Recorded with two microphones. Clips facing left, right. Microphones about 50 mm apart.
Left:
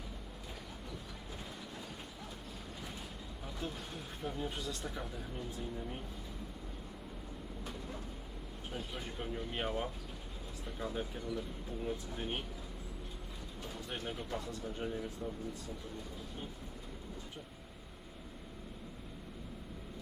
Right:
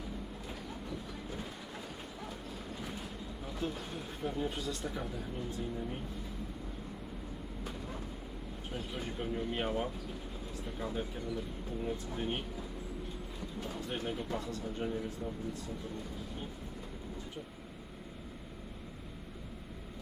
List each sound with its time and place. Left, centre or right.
1.5 s train: centre
3.4 s speech: centre
8.7 s speech: centre
13.7 s speech: centre